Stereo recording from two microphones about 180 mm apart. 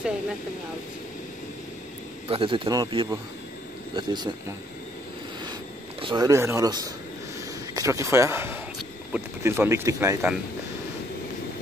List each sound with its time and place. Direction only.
2.2 s a man's voice: 30° right (ahead or behind)
5.5 s speech: 25° right (ahead or behind)